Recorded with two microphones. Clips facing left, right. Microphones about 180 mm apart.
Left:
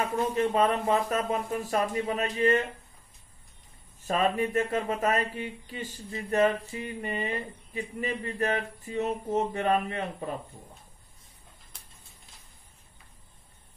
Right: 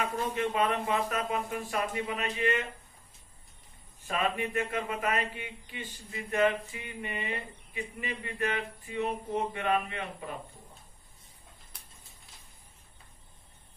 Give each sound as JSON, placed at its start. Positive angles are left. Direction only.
{"t": 0.3, "sound": "speech", "side_deg": 40}
{"t": 4.0, "sound": "speech", "side_deg": 35}